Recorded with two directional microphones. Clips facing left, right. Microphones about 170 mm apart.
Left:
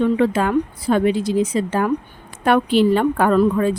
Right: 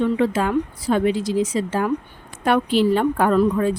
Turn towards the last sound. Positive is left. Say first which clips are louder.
# left 2 dB
turn(degrees=70)  # may be behind; listen again after turning